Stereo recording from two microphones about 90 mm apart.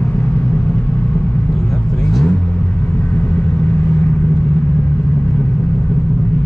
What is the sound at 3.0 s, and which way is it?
Vehicle, 15° left (ahead or behind).